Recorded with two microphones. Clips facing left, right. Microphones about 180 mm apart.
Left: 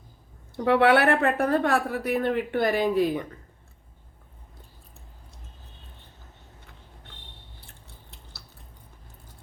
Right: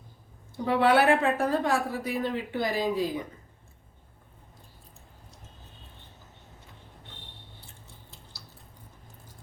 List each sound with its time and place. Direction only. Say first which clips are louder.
0.5 s a woman's voice: left 3 dB; 65° left (ahead or behind)